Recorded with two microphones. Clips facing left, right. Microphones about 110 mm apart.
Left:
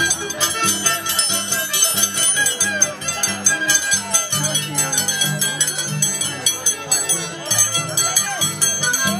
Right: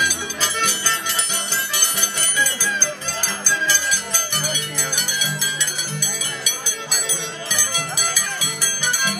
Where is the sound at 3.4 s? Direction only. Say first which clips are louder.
Right 2 dB; 20° left (ahead or behind).